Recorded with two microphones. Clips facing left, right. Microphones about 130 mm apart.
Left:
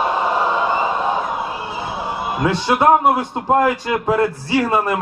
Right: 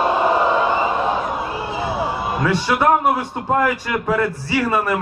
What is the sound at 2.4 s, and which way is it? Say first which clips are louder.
A man's voice: left 2 dB; 25° left (ahead or behind).